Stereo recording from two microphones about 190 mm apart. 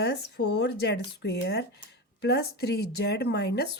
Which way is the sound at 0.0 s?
60° left (ahead or behind).